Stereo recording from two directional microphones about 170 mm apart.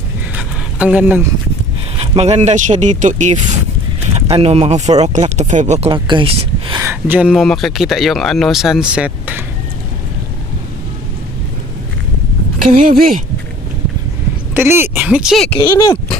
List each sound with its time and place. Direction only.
0.3 s a sound: 5° right (ahead or behind)
2.0 s speech: 40° right (ahead or behind)
5.9 s speech: 30° right (ahead or behind)
6.9 s speech: 10° right (ahead or behind)
12.6 s speech: 50° right (ahead or behind)
14.5 s speech: 10° right (ahead or behind)
15.5 s speech: 25° left (ahead or behind)